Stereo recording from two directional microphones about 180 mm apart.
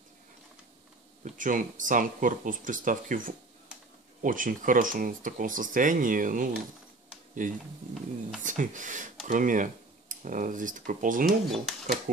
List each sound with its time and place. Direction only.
1.2 s speech: 45° right (ahead or behind)
11.2 s speech: centre (ahead or behind)